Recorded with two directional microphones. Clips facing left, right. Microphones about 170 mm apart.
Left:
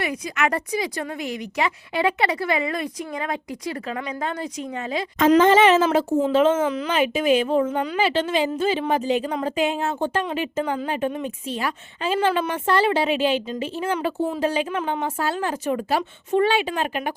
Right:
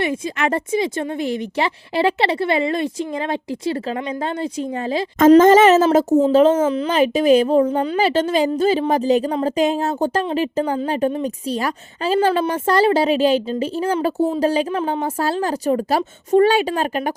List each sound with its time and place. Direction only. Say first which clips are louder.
0.0 s a woman's voice: right 4 dB; 25° right (ahead or behind)
5.3 s speech: right 5 dB; 40° right (ahead or behind)